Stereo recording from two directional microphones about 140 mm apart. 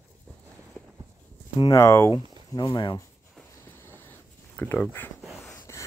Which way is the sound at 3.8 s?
15° left (ahead or behind).